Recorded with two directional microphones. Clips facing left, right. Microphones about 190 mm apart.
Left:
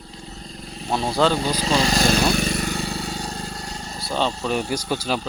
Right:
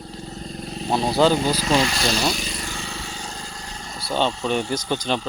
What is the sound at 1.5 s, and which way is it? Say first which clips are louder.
Speech: even; 30° left (ahead or behind).